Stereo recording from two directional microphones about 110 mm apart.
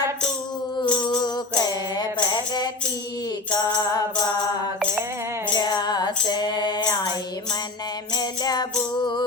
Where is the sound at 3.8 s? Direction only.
35° left (ahead or behind).